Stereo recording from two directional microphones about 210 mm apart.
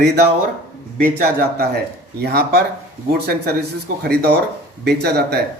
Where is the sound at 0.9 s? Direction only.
45° right (ahead or behind).